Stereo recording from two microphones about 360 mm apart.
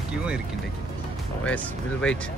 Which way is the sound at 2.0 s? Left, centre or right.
Centre.